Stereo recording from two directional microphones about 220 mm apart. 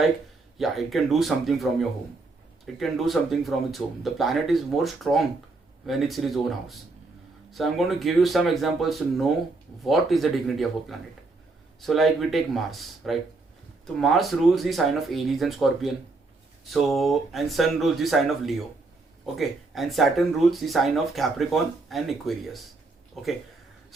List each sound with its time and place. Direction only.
0.6 s speech: centre (ahead or behind)